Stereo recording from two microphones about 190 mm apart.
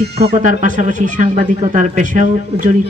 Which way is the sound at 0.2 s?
40° right (ahead or behind).